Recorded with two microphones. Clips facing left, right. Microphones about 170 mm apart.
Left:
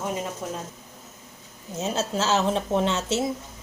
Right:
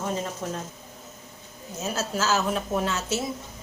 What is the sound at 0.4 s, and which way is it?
Speech, 5° left (ahead or behind).